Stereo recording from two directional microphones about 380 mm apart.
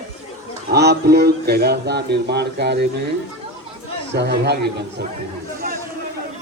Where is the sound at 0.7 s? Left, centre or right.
Right.